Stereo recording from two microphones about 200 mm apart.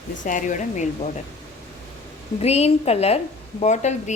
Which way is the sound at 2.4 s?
30° left (ahead or behind).